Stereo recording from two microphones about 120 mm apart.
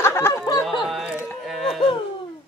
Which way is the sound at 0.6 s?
Centre (ahead or behind).